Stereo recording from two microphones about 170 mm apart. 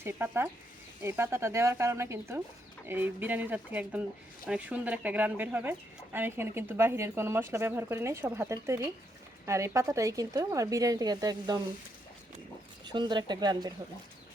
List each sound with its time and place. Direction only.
0.0 s a woman's voice: 15° right (ahead or behind)
12.8 s a woman's voice: 25° right (ahead or behind)